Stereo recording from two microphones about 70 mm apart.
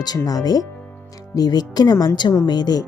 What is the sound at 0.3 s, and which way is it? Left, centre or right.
A woman's voice, left.